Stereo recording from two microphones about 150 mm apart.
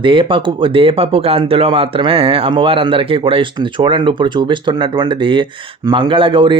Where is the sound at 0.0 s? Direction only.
35° right (ahead or behind).